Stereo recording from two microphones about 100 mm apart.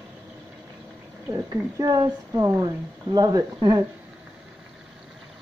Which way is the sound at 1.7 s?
40° right (ahead or behind).